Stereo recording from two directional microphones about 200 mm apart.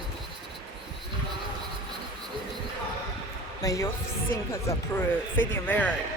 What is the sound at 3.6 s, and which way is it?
Speech, 15° left (ahead or behind).